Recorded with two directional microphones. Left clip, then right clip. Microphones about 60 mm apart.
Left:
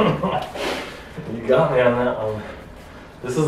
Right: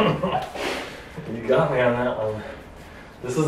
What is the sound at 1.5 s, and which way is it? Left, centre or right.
Speech, centre.